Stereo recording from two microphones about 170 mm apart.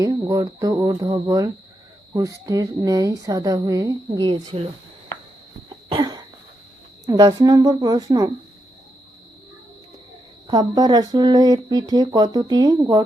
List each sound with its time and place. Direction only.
0.0 s speech: 20° right (ahead or behind)
5.6 s cough: 25° right (ahead or behind)
7.0 s speech: 20° right (ahead or behind)
10.4 s speech: 25° right (ahead or behind)